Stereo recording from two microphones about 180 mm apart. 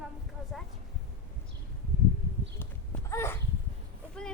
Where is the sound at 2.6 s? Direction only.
15° left (ahead or behind).